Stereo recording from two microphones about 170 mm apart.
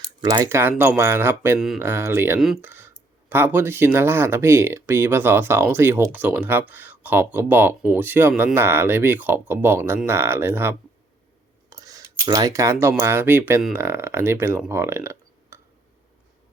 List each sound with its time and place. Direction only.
0.3 s speech: 15° right (ahead or behind)
1.5 s speech: centre (ahead or behind)
1.8 s speech: 15° right (ahead or behind)
11.7 s cutlery: 20° right (ahead or behind)
13.0 s speech: 15° right (ahead or behind)